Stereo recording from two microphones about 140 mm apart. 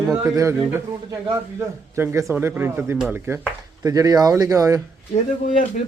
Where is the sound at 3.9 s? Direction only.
25° right (ahead or behind).